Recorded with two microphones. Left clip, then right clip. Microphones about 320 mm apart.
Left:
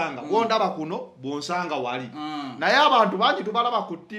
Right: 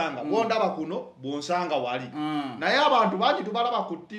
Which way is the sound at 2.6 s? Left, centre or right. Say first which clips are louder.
Left 3 dB; left.